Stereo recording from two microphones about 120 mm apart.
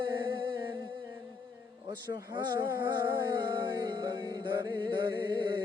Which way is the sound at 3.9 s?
40° right (ahead or behind).